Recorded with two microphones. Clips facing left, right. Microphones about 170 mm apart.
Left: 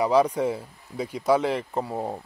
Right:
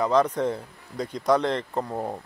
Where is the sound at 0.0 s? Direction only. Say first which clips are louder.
Left 1 dB; 10° left (ahead or behind).